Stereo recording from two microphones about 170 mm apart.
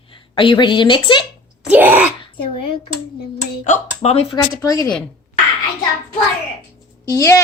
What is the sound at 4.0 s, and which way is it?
Speech, 40° left (ahead or behind).